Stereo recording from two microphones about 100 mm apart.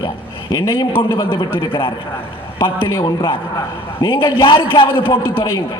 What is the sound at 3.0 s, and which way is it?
A man's voice, 55° left (ahead or behind).